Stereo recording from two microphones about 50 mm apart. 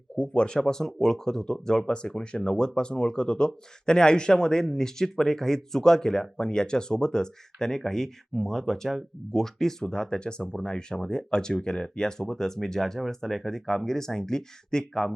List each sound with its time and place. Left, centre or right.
0.2 s speech: centre